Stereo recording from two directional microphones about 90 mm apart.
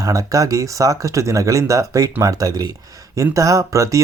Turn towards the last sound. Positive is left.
turn(degrees=-35)  # may be behind; listen again after turning